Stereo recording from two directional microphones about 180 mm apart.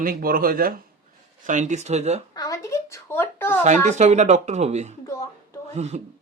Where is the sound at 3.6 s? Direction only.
40° right (ahead or behind).